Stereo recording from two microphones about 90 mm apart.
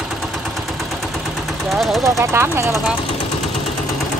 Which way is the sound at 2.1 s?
30° right (ahead or behind).